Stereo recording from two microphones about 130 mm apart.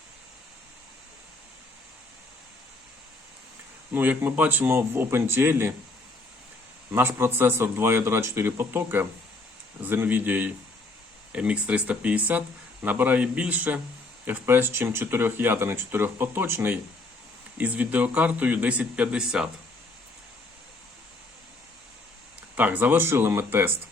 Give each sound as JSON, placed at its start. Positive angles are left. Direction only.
{"t": 3.9, "sound": "speech", "side_deg": -15}
{"t": 6.9, "sound": "speech", "side_deg": -15}
{"t": 22.5, "sound": "speech", "side_deg": -15}